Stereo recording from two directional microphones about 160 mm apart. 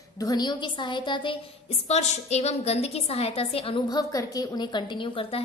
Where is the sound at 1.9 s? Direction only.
45° left (ahead or behind).